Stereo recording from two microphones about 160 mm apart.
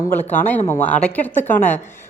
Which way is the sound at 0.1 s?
10° left (ahead or behind).